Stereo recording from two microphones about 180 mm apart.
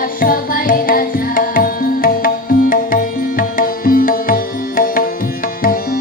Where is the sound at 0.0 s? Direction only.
55° left (ahead or behind).